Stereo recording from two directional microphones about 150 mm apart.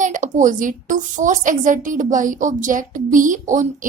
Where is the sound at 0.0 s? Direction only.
55° right (ahead or behind).